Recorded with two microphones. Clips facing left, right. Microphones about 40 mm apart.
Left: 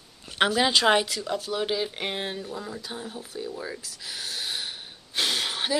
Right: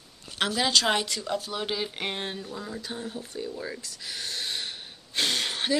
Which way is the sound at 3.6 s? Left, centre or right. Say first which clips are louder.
Even; centre.